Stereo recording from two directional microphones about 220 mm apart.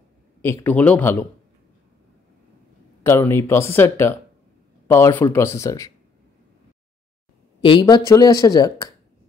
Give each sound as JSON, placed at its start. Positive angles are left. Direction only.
{"t": 0.4, "sound": "speech", "side_deg": 10}
{"t": 3.0, "sound": "speech", "side_deg": 10}
{"t": 7.6, "sound": "speech", "side_deg": 20}